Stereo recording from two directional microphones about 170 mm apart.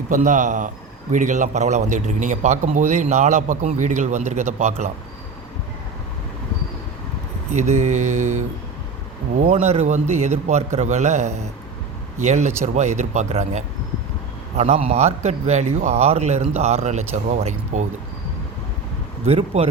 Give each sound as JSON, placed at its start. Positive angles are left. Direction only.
{"t": 0.1, "sound": "a man's voice", "side_deg": -50}
{"t": 7.5, "sound": "a man's voice", "side_deg": -40}
{"t": 19.2, "sound": "a man's voice", "side_deg": -40}